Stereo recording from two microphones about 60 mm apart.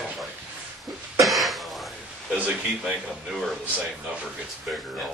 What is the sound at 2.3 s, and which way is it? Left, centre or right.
Speech, right.